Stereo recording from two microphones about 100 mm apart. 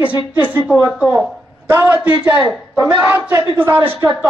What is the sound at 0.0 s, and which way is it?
A woman's voice, 15° right (ahead or behind).